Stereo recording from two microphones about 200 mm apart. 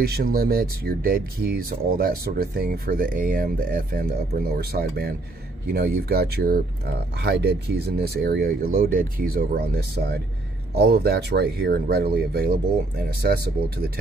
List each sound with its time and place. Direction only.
0.0 s speech: 50° right (ahead or behind)